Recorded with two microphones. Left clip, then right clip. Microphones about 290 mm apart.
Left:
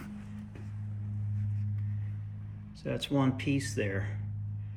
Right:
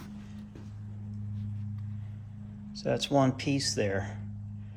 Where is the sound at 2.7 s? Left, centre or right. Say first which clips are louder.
Right 5 dB; centre.